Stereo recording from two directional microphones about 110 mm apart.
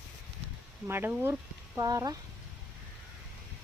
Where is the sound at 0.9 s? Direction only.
20° right (ahead or behind).